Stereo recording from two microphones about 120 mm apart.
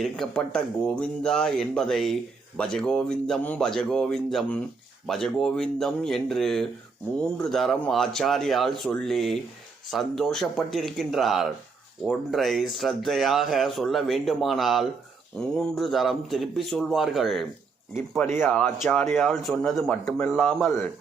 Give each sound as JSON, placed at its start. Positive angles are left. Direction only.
{"t": 0.0, "sound": "speech", "side_deg": 5}
{"t": 18.3, "sound": "speech", "side_deg": 15}
{"t": 20.1, "sound": "a man's voice", "side_deg": 20}
{"t": 20.3, "sound": "speech", "side_deg": 5}